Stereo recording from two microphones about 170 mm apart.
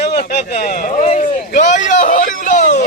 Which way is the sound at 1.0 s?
45° left (ahead or behind).